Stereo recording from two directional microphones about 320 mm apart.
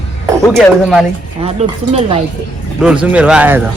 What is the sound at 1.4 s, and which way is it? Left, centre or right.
Speech, centre.